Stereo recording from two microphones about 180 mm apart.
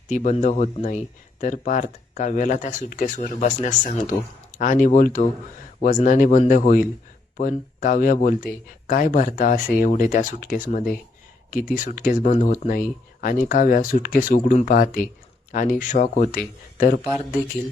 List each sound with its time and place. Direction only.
0.1 s speech: 40° left (ahead or behind)
17.0 s speech: 5° right (ahead or behind)